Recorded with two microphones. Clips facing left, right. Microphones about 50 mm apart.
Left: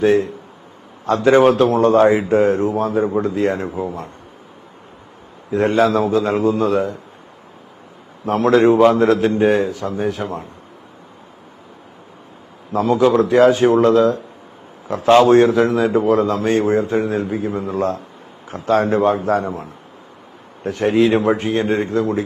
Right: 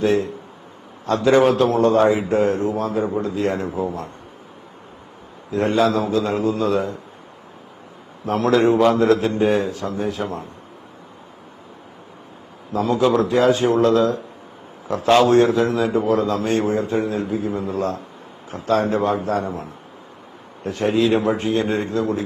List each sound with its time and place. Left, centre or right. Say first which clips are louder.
0.0 s speech: left 4 dB; left
5.5 s speech: left 3 dB; left
8.2 s a man's voice: left 3 dB; left
12.7 s speech: left 3 dB; left
14.8 s speech: left 4 dB; left
20.7 s speech: left 3 dB; left